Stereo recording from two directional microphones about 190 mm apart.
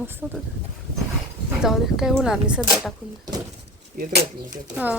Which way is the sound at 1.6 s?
Centre (ahead or behind).